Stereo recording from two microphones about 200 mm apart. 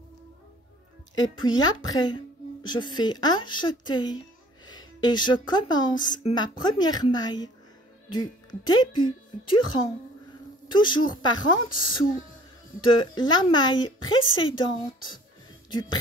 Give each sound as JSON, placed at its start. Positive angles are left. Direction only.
{"t": 1.4, "sound": "a woman's voice", "side_deg": 20}
{"t": 10.7, "sound": "a woman's voice", "side_deg": 20}